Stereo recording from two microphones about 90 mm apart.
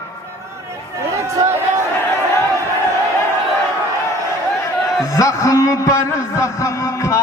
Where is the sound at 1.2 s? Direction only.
35° right (ahead or behind).